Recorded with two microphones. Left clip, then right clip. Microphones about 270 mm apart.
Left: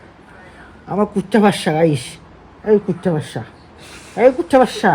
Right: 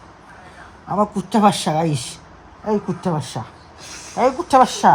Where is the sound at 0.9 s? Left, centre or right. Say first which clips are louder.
Left 2 dB; right.